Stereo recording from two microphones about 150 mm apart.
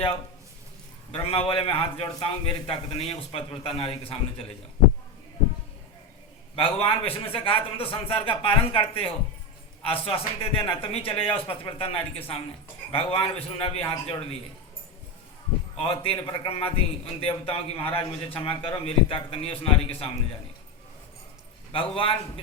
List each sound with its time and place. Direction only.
1.1 s a man's voice: 35° left (ahead or behind)
6.6 s a man's voice: 40° left (ahead or behind)
15.8 s a man's voice: 40° left (ahead or behind)
21.7 s a man's voice: 35° left (ahead or behind)